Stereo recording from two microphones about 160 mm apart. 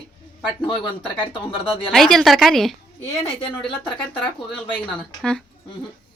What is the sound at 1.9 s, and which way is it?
Speech, centre (ahead or behind).